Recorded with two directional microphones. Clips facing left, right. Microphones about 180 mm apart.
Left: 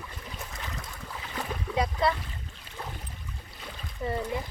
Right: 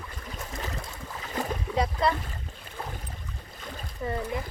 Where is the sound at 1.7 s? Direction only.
Centre (ahead or behind).